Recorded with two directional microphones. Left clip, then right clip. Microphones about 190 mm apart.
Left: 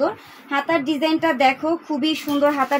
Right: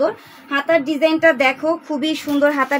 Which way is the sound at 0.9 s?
35° right (ahead or behind).